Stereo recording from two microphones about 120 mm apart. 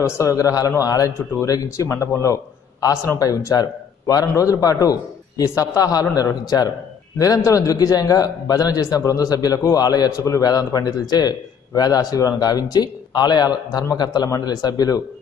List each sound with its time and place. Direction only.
0.0 s a man's voice: 25° left (ahead or behind)